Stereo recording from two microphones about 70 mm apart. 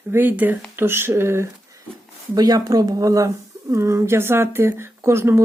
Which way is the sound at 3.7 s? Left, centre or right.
Right.